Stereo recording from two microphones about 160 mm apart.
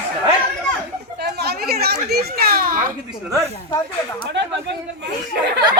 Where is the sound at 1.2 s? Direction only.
90° right.